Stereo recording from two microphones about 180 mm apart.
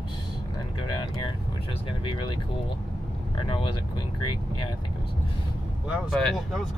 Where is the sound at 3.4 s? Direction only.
25° left (ahead or behind).